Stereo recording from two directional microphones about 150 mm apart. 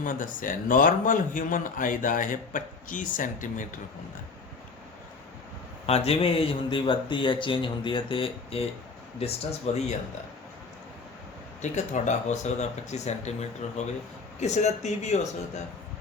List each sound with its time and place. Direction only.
0.0 s a man's voice: 60° left (ahead or behind)
5.8 s speech: 40° left (ahead or behind)
11.6 s speech: 50° left (ahead or behind)